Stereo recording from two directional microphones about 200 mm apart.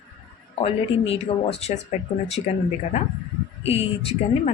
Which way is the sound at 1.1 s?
30° left (ahead or behind).